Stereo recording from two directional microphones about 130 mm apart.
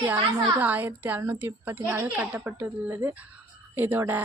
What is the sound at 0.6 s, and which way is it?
A woman's voice, 15° right (ahead or behind).